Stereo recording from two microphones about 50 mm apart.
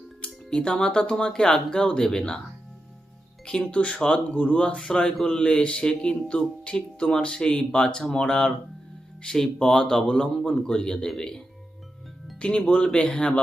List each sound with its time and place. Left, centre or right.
0.5 s a man's voice: centre
3.4 s speech: centre
3.8 s a man's voice: left